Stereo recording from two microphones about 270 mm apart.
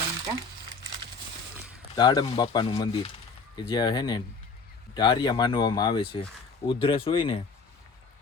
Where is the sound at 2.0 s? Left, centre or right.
Centre.